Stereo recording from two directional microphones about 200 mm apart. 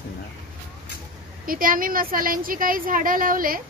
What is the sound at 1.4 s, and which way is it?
A woman's voice, 45° right (ahead or behind).